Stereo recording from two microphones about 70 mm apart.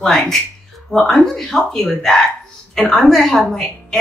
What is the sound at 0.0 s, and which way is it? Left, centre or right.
Speech, centre.